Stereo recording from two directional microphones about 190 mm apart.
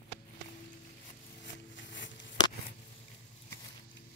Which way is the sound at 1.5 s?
70° left (ahead or behind).